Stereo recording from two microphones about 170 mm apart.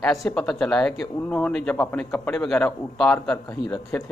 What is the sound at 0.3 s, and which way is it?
A man's voice, 5° left (ahead or behind).